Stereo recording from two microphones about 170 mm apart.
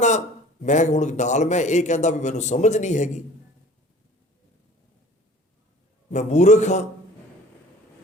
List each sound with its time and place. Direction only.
0.6 s a man's voice: 45° left (ahead or behind)
6.1 s a man's voice: 45° left (ahead or behind)